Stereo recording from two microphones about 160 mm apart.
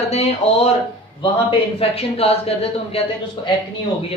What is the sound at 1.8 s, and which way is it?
A man's voice, 40° left (ahead or behind).